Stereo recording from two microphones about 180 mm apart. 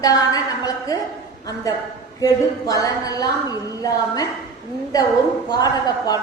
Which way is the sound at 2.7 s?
20° left (ahead or behind).